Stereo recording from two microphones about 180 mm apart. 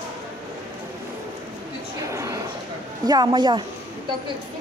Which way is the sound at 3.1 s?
25° right (ahead or behind).